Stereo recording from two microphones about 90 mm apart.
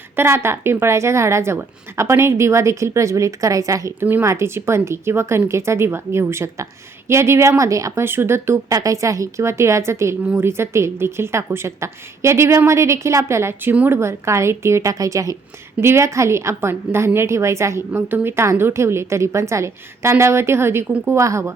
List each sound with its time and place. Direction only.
0.2 s a woman's voice: 30° right (ahead or behind)
4.0 s a woman's voice: 20° right (ahead or behind); by 8.0 s 35° right (ahead or behind)
8.0 s a woman's voice: 25° right (ahead or behind)